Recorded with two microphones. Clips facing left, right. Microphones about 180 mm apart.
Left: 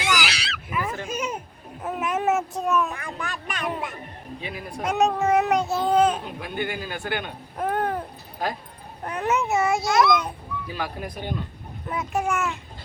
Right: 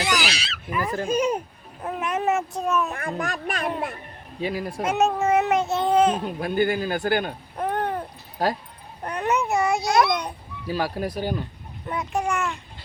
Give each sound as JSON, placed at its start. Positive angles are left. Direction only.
{"t": 0.0, "sound": "a sound", "side_deg": -30}
{"t": 0.7, "sound": "a sound", "side_deg": 5}
{"t": 0.9, "sound": "a man's voice", "side_deg": -35}
{"t": 1.8, "sound": "a child's voice", "side_deg": 0}
{"t": 2.9, "sound": "a man's voice", "side_deg": -45}
{"t": 4.8, "sound": "a child's voice", "side_deg": 0}
{"t": 6.4, "sound": "a man's voice", "side_deg": -40}
{"t": 7.6, "sound": "a sound", "side_deg": 5}
{"t": 9.0, "sound": "a child's voice", "side_deg": 0}
{"t": 10.7, "sound": "a man's voice", "side_deg": -40}
{"t": 11.9, "sound": "a child's voice", "side_deg": 5}